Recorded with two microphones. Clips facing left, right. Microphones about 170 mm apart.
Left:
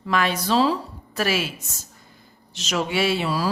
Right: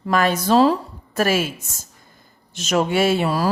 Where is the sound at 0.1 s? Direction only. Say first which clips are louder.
Right 5 dB; 45° right (ahead or behind).